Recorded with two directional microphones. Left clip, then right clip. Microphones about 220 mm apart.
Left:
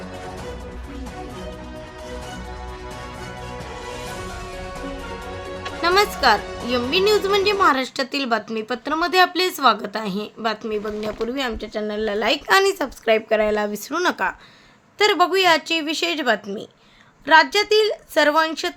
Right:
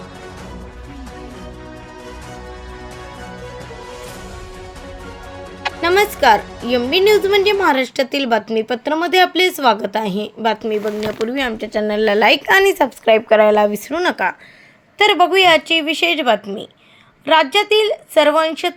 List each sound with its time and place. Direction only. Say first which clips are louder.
5.8 s speech: right 4 dB; 10° right (ahead or behind); by 12.4 s 30° right (ahead or behind)
12.5 s a woman's voice: right 5 dB; 20° right (ahead or behind)